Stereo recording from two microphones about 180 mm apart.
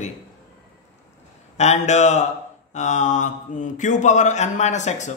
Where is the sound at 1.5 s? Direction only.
40° left (ahead or behind).